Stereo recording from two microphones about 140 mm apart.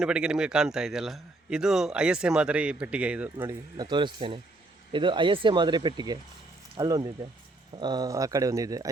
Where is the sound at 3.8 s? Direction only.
30° right (ahead or behind).